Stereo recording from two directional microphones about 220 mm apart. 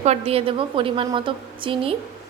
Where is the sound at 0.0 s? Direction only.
30° right (ahead or behind).